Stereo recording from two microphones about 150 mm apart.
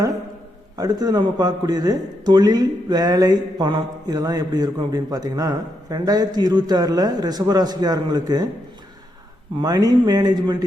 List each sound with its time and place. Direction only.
0.8 s speech: 25° right (ahead or behind)
9.6 s speech: 25° right (ahead or behind)